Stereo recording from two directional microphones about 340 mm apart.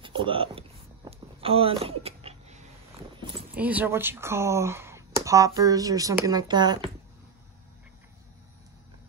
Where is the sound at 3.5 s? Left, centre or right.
Centre.